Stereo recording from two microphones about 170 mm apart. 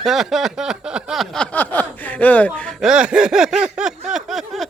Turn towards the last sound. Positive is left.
turn(degrees=0)  # may be behind; listen again after turning